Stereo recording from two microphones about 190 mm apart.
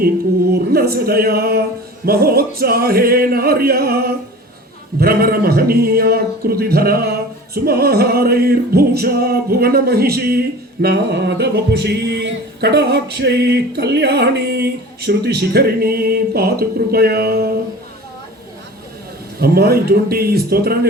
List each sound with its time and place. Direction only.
0.5 s speech: 55° right (ahead or behind)
2.0 s music: 55° right (ahead or behind)
4.9 s a man's voice: 55° right (ahead or behind)
19.4 s a man's voice: 55° right (ahead or behind)